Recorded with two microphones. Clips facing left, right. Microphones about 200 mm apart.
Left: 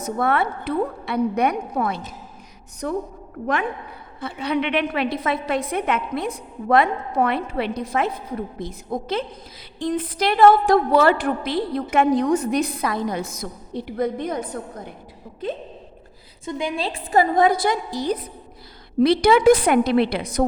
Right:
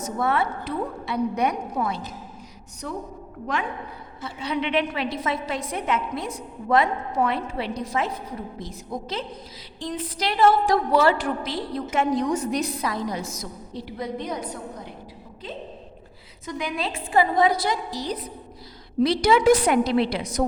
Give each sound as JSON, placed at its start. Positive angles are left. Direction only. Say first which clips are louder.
{"t": 0.0, "sound": "a woman's voice", "louder": "left 3 dB", "side_deg": 60}
{"t": 16.5, "sound": "a woman's voice", "louder": "left 3 dB", "side_deg": 25}